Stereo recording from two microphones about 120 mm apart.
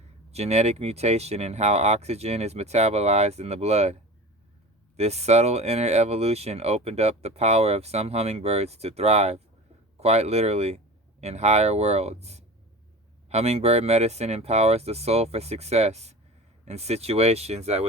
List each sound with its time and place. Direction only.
0.3 s speech: 65° right (ahead or behind)